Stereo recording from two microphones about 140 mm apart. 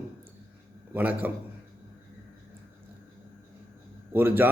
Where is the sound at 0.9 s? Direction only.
10° right (ahead or behind).